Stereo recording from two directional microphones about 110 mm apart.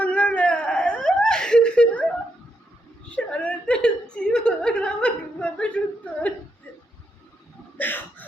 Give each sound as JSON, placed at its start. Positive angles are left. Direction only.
{"t": 0.0, "sound": "whimper", "side_deg": 10}
{"t": 3.2, "sound": "chuckle", "side_deg": 10}
{"t": 7.8, "sound": "a sound", "side_deg": 15}